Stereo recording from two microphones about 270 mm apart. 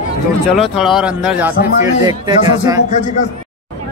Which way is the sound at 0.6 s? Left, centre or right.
Centre.